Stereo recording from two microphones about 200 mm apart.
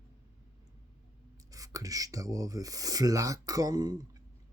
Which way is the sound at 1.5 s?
15° right (ahead or behind).